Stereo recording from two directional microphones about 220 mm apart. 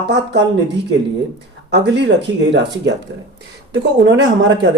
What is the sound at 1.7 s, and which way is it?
Speech, 50° right (ahead or behind).